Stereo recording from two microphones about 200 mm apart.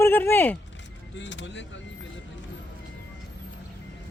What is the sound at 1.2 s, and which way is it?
Speech, 65° left (ahead or behind).